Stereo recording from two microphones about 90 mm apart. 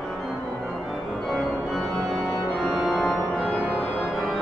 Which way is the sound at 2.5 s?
Centre (ahead or behind).